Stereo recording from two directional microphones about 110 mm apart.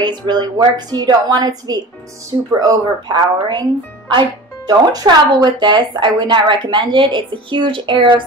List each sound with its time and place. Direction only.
0.0 s a woman's voice: 45° right (ahead or behind)
4.6 s speech: 40° right (ahead or behind)